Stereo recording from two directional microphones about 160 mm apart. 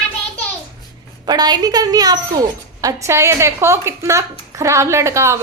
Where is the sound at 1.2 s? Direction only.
25° right (ahead or behind).